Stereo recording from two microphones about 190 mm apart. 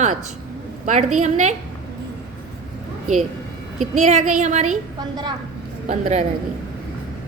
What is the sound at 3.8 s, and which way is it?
Speech, 35° right (ahead or behind).